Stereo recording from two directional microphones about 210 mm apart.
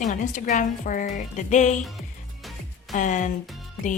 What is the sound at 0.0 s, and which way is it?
Speech, 35° left (ahead or behind).